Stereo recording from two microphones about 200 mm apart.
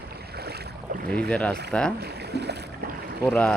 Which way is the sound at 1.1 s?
5° left (ahead or behind).